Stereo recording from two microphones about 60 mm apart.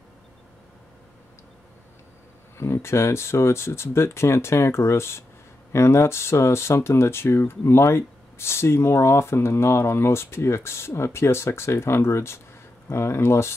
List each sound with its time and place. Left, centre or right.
2.5 s speech: left